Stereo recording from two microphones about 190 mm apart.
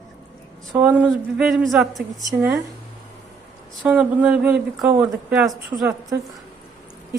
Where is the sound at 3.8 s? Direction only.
5° right (ahead or behind).